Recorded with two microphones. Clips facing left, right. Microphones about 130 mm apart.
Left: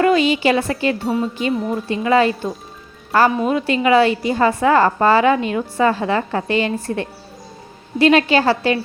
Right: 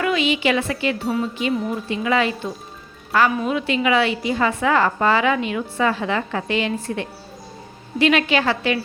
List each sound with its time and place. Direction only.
0.0 s a woman's voice: 40° left (ahead or behind)